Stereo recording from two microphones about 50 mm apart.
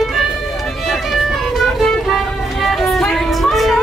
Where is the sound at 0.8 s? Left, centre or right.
Centre.